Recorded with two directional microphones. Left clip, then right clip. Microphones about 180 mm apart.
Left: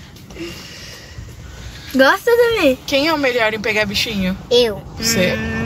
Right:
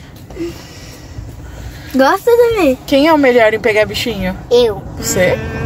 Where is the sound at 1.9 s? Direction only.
15° right (ahead or behind).